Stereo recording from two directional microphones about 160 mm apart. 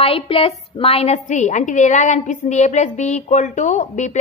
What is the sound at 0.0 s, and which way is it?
A woman's voice, 35° left (ahead or behind).